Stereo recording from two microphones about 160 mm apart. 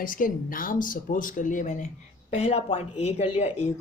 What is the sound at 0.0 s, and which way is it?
Speech, 60° left (ahead or behind).